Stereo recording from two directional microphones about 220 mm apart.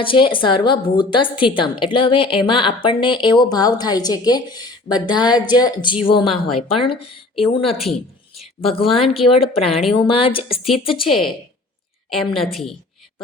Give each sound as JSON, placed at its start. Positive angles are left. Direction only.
{"t": 0.0, "sound": "a woman's voice", "side_deg": 25}
{"t": 7.7, "sound": "a woman's voice", "side_deg": 0}
{"t": 8.4, "sound": "a sound", "side_deg": 25}
{"t": 9.0, "sound": "a woman's voice", "side_deg": 25}
{"t": 11.1, "sound": "a woman's voice", "side_deg": 0}